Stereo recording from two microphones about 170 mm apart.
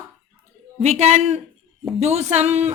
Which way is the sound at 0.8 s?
40° right (ahead or behind).